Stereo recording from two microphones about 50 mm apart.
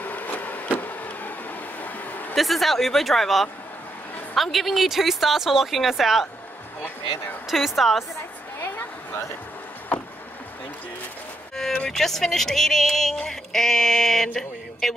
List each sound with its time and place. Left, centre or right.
0.0 s power windows: left
1.8 s a sound: left
2.3 s speech: centre
7.4 s speech: centre
8.5 s a sound: left
11.9 s speech: centre